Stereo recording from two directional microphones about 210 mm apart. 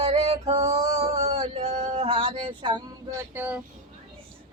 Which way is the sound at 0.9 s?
30° right (ahead or behind).